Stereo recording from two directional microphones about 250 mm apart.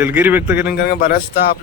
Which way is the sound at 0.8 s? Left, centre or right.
Left.